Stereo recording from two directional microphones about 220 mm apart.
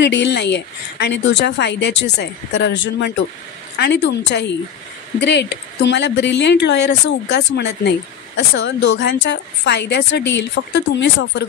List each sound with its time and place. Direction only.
0.0 s a woman's voice: 50° left (ahead or behind)